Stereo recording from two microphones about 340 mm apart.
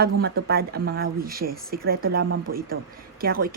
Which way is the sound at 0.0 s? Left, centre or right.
Right.